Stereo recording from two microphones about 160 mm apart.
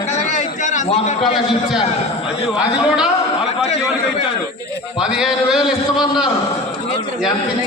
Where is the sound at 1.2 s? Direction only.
Centre (ahead or behind).